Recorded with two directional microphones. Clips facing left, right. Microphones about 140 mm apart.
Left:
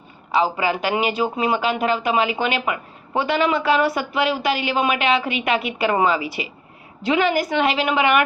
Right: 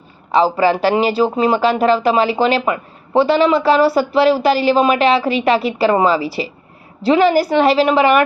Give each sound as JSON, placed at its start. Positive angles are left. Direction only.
{"t": 0.3, "sound": "speech", "side_deg": -35}